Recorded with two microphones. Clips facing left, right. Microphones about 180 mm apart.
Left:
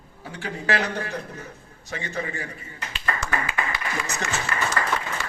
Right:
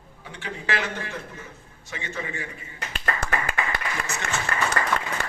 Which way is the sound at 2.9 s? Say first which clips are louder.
Even; 55° right (ahead or behind).